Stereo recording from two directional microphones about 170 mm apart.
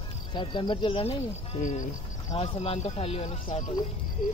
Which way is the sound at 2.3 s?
35° left (ahead or behind).